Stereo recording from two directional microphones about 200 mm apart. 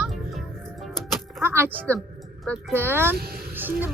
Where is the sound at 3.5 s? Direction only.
10° right (ahead or behind).